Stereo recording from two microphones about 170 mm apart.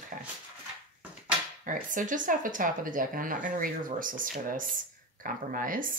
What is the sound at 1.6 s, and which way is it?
Speech, 50° right (ahead or behind).